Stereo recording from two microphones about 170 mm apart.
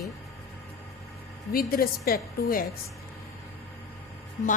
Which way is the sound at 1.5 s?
60° left (ahead or behind).